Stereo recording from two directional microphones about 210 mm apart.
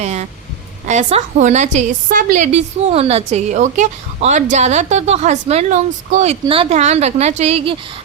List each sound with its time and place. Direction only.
0.0 s a woman's voice: 35° right (ahead or behind)